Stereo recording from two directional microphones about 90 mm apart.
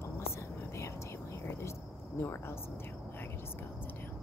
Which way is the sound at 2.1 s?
30° left (ahead or behind).